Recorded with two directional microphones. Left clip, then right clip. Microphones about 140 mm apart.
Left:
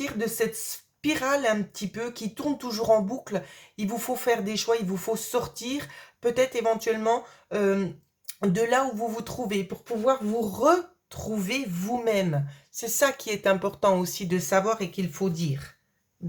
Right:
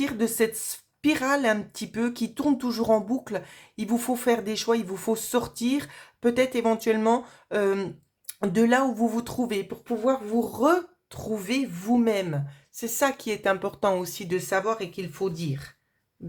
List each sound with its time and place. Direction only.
0.0 s speech: 45° right (ahead or behind); by 15.7 s 25° right (ahead or behind)